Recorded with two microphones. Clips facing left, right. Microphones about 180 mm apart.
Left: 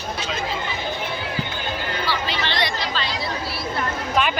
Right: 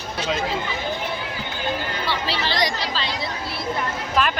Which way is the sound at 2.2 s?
35° right (ahead or behind).